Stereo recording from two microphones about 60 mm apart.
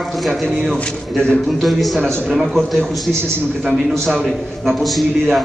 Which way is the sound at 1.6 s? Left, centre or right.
Centre.